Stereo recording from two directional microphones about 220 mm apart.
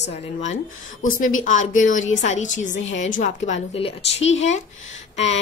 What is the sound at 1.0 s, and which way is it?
A woman's voice, 35° left (ahead or behind).